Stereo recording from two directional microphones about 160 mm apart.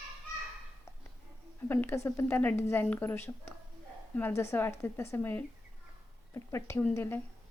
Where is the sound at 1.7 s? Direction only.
15° left (ahead or behind).